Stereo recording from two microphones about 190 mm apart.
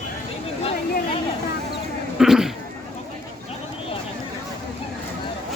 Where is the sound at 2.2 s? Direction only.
Centre (ahead or behind).